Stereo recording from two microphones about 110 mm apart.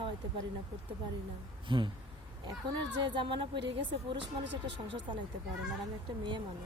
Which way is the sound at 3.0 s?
50° right (ahead or behind).